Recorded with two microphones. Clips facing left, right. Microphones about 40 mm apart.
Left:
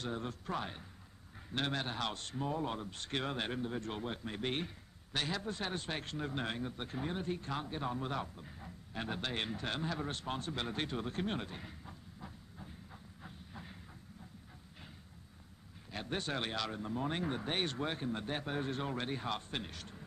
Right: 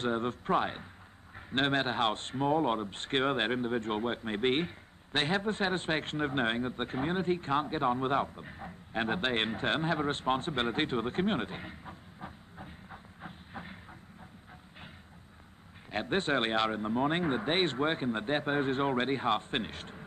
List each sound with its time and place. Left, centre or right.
0.0 s speech: right
15.9 s speech: right